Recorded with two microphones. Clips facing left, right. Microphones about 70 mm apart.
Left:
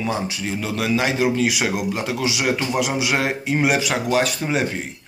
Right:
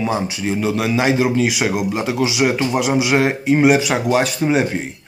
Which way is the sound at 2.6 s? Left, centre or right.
Centre.